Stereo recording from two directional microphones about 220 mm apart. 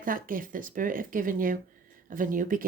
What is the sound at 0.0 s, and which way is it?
Speech, 40° right (ahead or behind).